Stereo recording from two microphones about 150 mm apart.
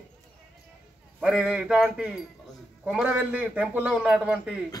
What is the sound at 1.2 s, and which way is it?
A man's voice, 5° right (ahead or behind).